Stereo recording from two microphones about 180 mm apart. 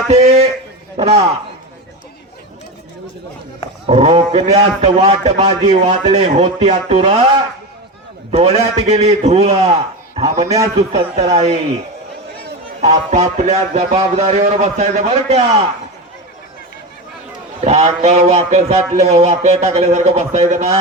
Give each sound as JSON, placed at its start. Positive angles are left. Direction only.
{"t": 0.1, "sound": "a man's voice", "side_deg": -40}
{"t": 3.8, "sound": "a man's voice", "side_deg": -40}
{"t": 8.3, "sound": "a man's voice", "side_deg": -35}
{"t": 12.8, "sound": "a man's voice", "side_deg": -40}
{"t": 17.6, "sound": "a man's voice", "side_deg": -40}